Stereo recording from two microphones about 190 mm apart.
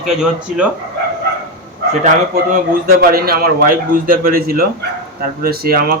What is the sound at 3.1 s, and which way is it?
A man's voice, 50° right (ahead or behind).